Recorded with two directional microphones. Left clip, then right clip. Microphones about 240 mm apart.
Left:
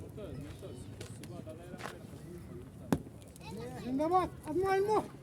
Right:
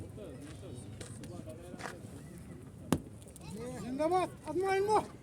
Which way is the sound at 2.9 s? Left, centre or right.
Right.